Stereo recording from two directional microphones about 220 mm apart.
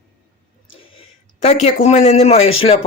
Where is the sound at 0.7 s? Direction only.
25° left (ahead or behind).